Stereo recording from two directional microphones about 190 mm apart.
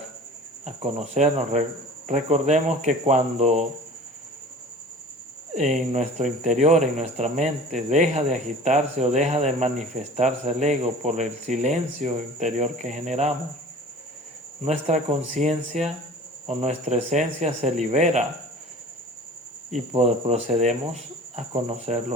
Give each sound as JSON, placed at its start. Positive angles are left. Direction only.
{"t": 0.6, "sound": "speech", "side_deg": -35}
{"t": 5.5, "sound": "speech", "side_deg": -40}
{"t": 14.6, "sound": "speech", "side_deg": -35}
{"t": 19.9, "sound": "speech", "side_deg": -35}